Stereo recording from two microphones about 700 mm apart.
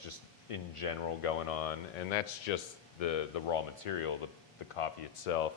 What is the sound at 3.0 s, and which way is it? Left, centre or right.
Speech, left.